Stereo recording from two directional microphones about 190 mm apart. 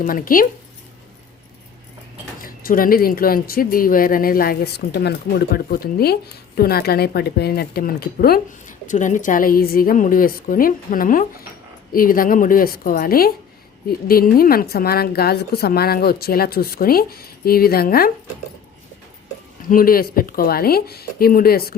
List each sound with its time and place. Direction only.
0.0 s speech: 45° left (ahead or behind)
2.4 s speech: 50° left (ahead or behind)
19.6 s speech: 50° left (ahead or behind)